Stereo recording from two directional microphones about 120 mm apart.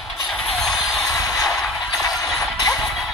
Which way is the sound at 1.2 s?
30° left (ahead or behind).